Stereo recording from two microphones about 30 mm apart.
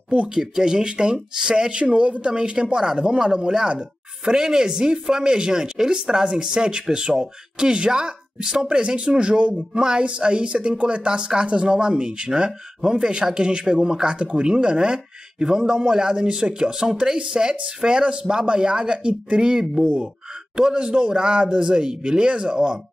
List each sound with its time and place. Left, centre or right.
0.3 s speech: right
1.7 s a woman's voice: right
8.6 s speech: right
19.6 s speech: centre
20.5 s speech: right